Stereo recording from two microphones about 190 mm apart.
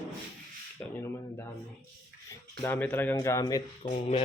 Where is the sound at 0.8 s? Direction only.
10° left (ahead or behind).